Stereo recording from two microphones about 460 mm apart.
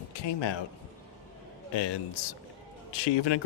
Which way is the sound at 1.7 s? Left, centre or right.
Left.